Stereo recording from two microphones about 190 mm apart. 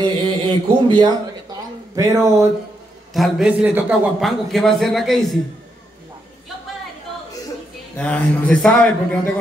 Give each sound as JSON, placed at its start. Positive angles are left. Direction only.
{"t": 0.0, "sound": "speech", "side_deg": -25}
{"t": 3.1, "sound": "a man's voice", "side_deg": 0}
{"t": 8.0, "sound": "a man's voice", "side_deg": 5}